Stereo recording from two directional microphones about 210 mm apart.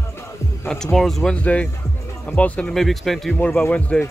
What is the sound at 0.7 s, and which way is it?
Speech, 5° left (ahead or behind).